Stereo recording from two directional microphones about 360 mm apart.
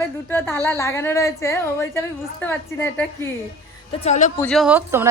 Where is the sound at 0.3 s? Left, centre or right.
Centre.